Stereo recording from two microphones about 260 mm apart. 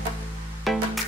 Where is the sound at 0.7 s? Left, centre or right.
Centre.